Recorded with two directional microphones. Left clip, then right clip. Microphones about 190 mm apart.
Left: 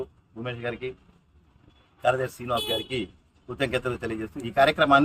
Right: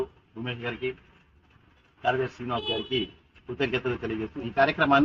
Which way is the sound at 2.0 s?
25° left (ahead or behind).